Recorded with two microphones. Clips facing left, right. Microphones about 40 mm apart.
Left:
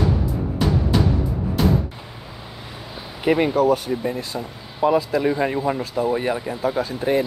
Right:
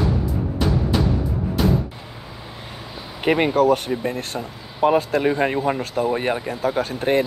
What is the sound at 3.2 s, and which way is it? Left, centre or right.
Speech, right.